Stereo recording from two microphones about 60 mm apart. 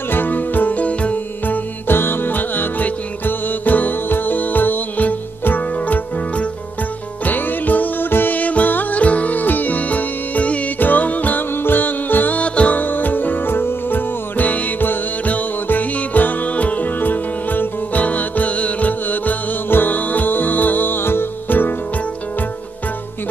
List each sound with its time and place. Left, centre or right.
0.1 s music: left